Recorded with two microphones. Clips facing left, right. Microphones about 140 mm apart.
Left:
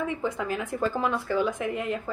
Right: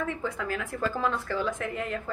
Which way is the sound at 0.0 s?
15° left (ahead or behind).